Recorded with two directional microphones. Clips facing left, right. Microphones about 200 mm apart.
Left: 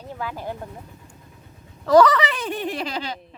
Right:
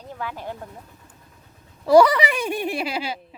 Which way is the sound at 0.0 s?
10° left (ahead or behind).